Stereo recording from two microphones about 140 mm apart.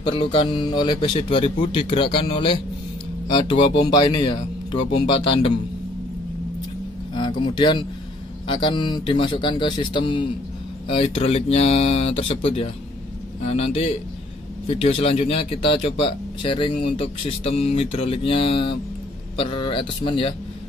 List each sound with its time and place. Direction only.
0.0 s speech: 40° left (ahead or behind)
7.2 s speech: 35° left (ahead or behind)